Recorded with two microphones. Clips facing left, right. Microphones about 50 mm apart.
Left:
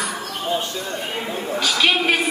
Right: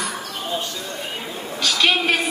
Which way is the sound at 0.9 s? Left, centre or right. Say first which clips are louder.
Left 3 dB; left.